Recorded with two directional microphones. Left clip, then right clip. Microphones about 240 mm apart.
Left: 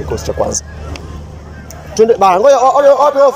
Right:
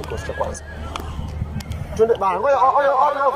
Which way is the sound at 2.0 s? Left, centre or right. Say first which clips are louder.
Left 9 dB; left.